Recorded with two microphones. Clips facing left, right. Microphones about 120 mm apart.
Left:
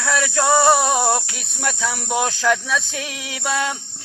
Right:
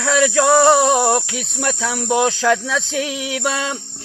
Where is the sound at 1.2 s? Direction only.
90° right.